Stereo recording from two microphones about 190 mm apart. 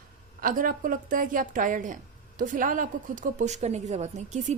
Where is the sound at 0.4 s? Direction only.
45° right (ahead or behind).